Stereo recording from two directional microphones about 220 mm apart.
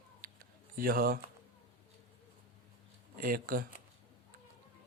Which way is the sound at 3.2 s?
40° right (ahead or behind).